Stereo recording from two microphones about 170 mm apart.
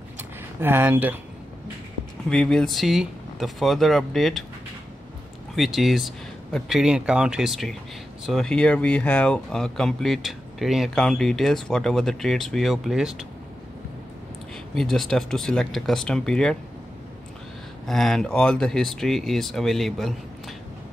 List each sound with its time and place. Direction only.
0.6 s speech: 10° right (ahead or behind)
2.2 s speech: 5° left (ahead or behind)
5.6 s speech: centre (ahead or behind)
14.8 s speech: centre (ahead or behind)
17.8 s speech: centre (ahead or behind)